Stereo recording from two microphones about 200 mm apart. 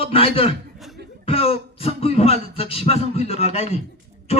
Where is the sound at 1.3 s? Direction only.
30° left (ahead or behind).